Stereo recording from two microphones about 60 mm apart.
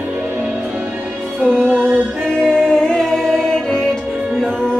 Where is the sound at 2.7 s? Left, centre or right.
Centre.